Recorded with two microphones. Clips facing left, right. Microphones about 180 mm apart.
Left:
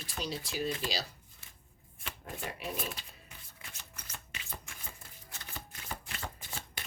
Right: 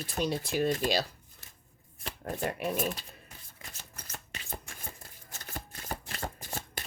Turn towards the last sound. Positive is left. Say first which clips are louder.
# right 5 dB
turn(degrees=-45)  # may be behind; listen again after turning